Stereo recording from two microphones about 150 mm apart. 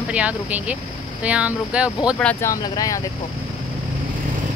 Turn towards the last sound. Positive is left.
turn(degrees=25)  # may be behind; listen again after turning